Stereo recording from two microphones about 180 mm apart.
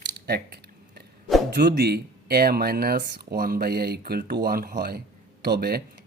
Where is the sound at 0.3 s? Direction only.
60° right (ahead or behind).